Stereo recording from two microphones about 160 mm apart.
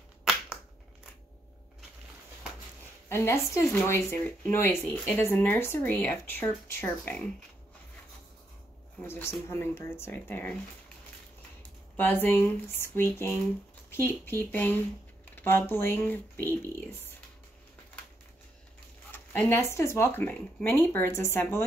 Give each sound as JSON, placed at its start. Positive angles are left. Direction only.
{"t": 3.1, "sound": "speech", "side_deg": 15}
{"t": 9.0, "sound": "speech", "side_deg": 15}
{"t": 12.0, "sound": "speech", "side_deg": 10}
{"t": 19.1, "sound": "speech", "side_deg": 15}